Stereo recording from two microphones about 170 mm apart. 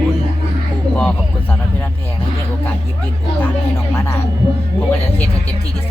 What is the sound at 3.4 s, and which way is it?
Speech, 15° left (ahead or behind).